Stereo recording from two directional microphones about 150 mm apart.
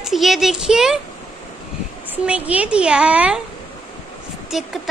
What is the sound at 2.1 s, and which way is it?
A woman's voice, 10° right (ahead or behind).